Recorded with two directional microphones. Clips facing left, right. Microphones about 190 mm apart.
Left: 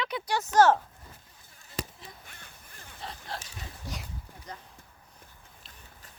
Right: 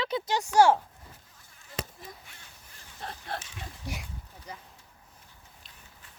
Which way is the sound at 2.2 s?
50° left (ahead or behind).